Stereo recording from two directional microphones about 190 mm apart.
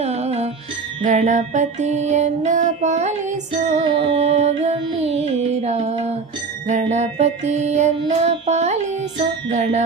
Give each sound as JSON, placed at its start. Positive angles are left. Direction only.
{"t": 0.0, "sound": "music", "side_deg": -35}